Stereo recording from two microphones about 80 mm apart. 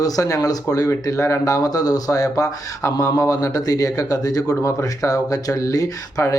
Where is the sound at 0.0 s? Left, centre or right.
Left.